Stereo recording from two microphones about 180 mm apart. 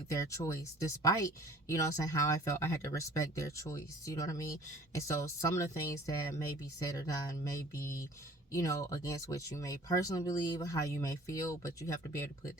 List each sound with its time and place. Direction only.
0.1 s speech: 15° left (ahead or behind)
8.5 s speech: 15° left (ahead or behind)